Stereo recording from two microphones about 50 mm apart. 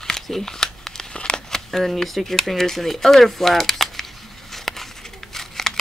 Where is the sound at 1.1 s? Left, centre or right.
Centre.